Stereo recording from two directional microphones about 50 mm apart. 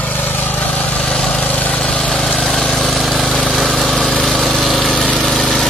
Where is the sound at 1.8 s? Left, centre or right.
Centre.